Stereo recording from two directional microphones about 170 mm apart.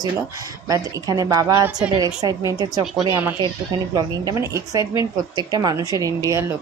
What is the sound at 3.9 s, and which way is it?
Speech, 20° right (ahead or behind).